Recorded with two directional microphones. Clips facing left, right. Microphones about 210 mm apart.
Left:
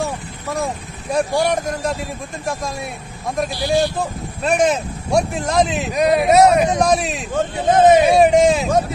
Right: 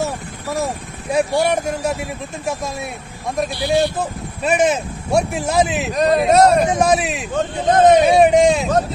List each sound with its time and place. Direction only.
0.0 s a sound: centre (ahead or behind)
1.1 s a man's voice: 5° right (ahead or behind)
3.4 s a man's voice: 60° right (ahead or behind)
4.4 s speech: 5° right (ahead or behind)
5.9 s speech: 10° left (ahead or behind)
6.8 s speech: 5° right (ahead or behind)